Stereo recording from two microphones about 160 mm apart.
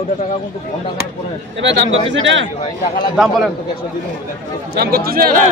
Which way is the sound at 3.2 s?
Centre (ahead or behind).